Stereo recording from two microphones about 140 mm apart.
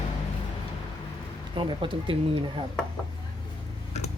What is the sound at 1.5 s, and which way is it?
Speech, 35° right (ahead or behind).